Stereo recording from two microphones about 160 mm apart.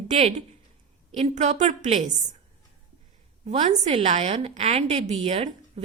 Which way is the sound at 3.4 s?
45° right (ahead or behind).